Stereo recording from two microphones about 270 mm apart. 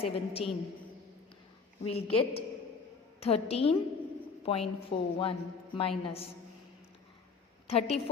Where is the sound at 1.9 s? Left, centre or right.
Left.